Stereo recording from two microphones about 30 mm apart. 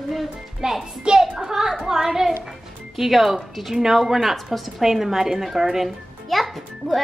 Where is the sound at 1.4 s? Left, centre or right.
Centre.